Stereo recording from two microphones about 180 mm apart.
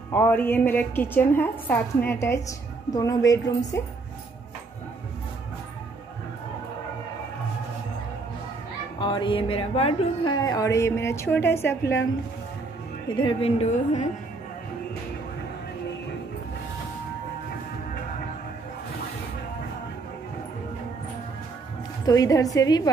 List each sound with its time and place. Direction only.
0.1 s a woman's voice: 10° left (ahead or behind)
3.3 s music: 20° left (ahead or behind)
9.0 s music: 25° left (ahead or behind)
10.3 s a woman's voice: 20° left (ahead or behind)
13.1 s a woman's voice: 25° left (ahead or behind)
22.0 s music: 20° left (ahead or behind)